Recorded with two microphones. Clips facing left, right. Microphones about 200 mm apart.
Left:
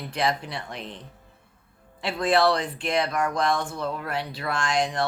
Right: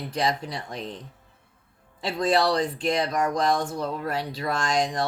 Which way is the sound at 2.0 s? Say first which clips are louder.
Left 1 dB; 35° right (ahead or behind).